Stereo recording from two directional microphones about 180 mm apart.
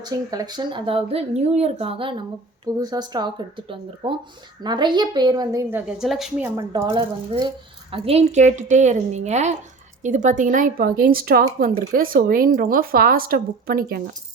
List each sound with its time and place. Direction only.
0.0 s speech: 20° right (ahead or behind)
6.0 s a woman's voice: centre (ahead or behind)
6.6 s a woman's voice: 20° right (ahead or behind); by 14.0 s 55° right (ahead or behind)